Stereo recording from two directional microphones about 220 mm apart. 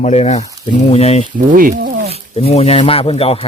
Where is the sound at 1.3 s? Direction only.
40° right (ahead or behind).